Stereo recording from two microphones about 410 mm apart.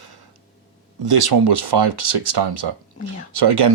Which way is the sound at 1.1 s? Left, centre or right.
Right.